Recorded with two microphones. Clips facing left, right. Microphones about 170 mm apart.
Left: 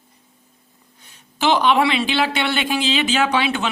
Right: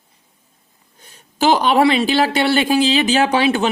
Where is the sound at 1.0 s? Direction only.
40° right (ahead or behind).